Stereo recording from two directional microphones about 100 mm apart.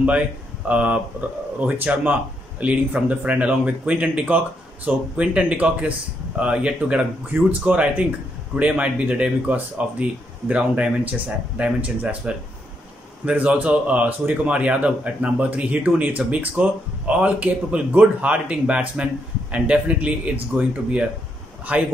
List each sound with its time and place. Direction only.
0.7 s speech: 15° right (ahead or behind)